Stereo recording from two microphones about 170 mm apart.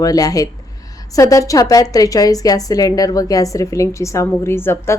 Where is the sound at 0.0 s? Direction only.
20° left (ahead or behind).